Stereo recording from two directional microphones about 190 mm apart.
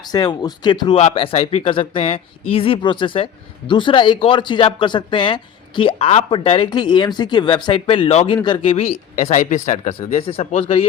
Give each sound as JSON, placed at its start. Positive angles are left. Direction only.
{"t": 0.0, "sound": "speech", "side_deg": 20}